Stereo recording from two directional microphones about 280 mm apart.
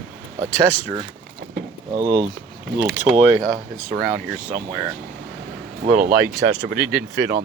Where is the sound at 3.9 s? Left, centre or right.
Right.